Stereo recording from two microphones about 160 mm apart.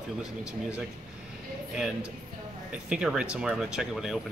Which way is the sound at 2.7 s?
5° right (ahead or behind).